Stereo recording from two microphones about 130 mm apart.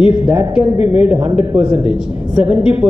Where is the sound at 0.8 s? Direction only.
45° left (ahead or behind).